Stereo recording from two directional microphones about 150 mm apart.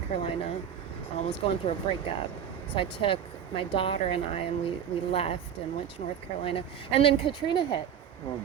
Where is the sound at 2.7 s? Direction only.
40° left (ahead or behind).